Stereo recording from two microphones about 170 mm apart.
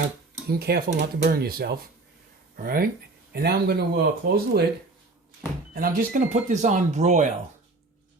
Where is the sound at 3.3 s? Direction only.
65° right (ahead or behind).